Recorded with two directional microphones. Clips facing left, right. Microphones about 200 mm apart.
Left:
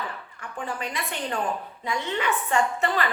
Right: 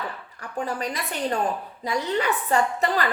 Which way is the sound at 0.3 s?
40° right (ahead or behind).